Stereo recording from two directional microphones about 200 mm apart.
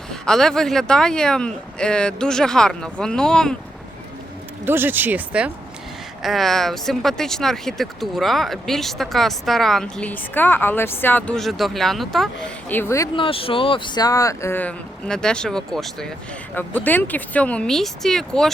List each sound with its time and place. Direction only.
0.1 s speech: 5° left (ahead or behind)
4.6 s speech: 10° right (ahead or behind); by 13.1 s 15° left (ahead or behind)
13.1 s speech: 25° left (ahead or behind); by 18.5 s centre (ahead or behind)